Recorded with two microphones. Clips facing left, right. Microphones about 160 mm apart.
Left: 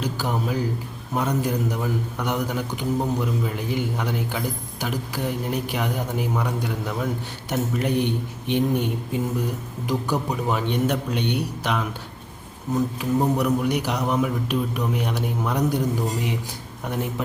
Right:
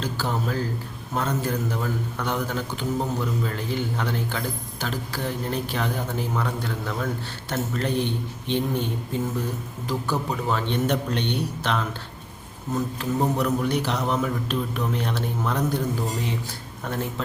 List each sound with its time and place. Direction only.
0.0 s a man's voice: 15° left (ahead or behind)